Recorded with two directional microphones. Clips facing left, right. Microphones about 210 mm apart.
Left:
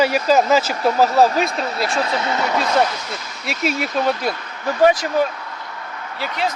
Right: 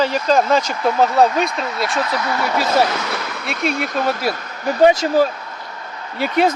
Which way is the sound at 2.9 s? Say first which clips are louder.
Right 6 dB; 75° right (ahead or behind).